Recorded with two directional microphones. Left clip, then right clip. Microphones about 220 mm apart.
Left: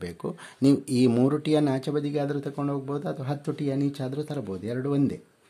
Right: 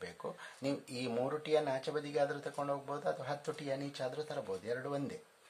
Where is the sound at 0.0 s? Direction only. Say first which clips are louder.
Left 9 dB; 35° left (ahead or behind).